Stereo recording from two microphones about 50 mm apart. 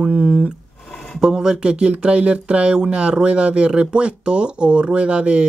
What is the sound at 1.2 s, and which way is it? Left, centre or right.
Speech, centre.